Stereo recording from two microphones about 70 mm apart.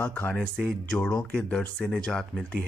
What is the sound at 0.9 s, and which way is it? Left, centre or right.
Speech, centre.